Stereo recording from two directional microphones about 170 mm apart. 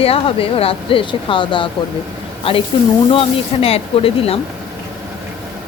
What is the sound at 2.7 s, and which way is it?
Speech, 30° left (ahead or behind).